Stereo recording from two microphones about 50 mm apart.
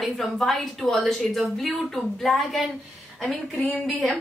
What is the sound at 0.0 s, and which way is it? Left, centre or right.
A woman's voice, centre.